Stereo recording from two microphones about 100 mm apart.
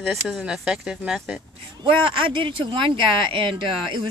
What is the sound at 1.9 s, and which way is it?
Speech, 60° right (ahead or behind).